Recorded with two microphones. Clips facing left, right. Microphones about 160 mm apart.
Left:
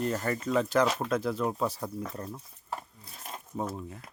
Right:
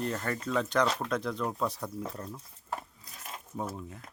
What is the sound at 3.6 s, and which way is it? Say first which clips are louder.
Speech: left 3 dB; centre (ahead or behind).